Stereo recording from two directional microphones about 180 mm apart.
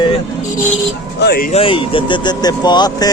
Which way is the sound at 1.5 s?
30° left (ahead or behind).